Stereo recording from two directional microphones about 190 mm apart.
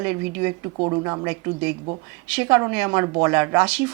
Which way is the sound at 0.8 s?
25° right (ahead or behind).